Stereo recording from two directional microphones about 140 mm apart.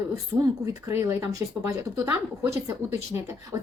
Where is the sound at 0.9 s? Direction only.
20° right (ahead or behind).